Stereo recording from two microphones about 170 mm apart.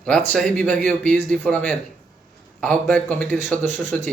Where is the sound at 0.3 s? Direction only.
5° left (ahead or behind).